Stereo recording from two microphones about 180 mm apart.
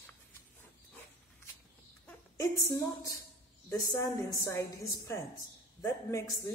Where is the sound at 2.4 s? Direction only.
15° left (ahead or behind).